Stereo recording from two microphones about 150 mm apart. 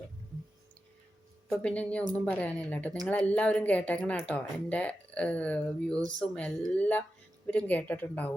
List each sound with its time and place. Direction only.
1.5 s speech: 10° left (ahead or behind)